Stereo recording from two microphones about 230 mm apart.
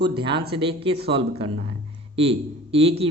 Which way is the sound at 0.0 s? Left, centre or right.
Right.